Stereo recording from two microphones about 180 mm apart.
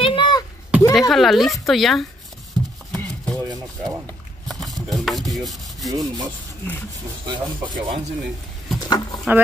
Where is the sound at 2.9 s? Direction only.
20° right (ahead or behind).